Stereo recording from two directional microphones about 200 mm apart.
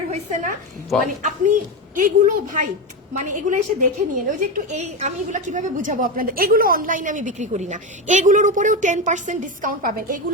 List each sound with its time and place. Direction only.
0.1 s a woman's voice: 40° right (ahead or behind)
0.9 s a woman's voice: centre (ahead or behind)
1.2 s a woman's voice: 40° right (ahead or behind)